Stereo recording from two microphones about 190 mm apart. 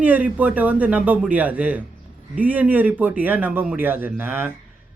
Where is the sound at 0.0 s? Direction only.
10° right (ahead or behind).